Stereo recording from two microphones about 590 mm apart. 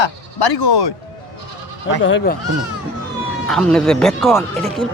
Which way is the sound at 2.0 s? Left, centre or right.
Centre.